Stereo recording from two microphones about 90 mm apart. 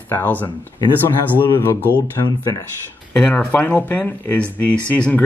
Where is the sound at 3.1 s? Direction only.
15° left (ahead or behind).